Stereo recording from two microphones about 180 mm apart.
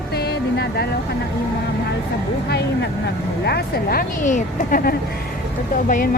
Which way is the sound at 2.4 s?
65° left (ahead or behind).